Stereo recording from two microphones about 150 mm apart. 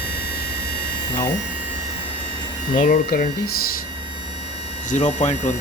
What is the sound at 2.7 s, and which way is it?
Speech, 65° left (ahead or behind).